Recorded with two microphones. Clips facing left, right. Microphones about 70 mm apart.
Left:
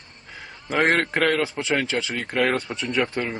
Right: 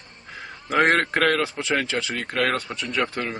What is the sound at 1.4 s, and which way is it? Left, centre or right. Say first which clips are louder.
Speech: left 1 dB; centre.